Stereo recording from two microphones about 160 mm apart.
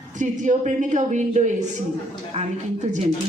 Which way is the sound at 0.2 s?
50° right (ahead or behind).